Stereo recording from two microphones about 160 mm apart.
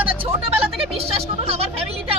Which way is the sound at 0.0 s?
35° right (ahead or behind).